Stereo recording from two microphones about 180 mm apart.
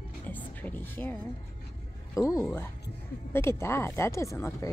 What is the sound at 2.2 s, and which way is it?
Speech, 20° left (ahead or behind).